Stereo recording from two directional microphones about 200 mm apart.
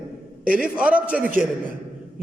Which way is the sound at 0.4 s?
5° right (ahead or behind).